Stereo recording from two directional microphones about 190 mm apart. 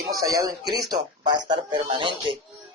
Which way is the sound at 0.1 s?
20° right (ahead or behind).